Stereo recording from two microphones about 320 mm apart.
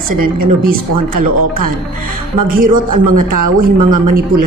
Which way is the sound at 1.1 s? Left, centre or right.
Right.